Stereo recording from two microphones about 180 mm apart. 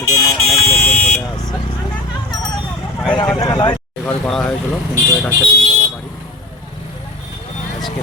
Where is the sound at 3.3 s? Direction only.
20° left (ahead or behind).